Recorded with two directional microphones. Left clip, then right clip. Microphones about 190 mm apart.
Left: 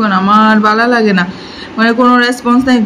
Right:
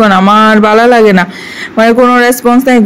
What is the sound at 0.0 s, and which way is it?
A woman's voice, 35° right (ahead or behind).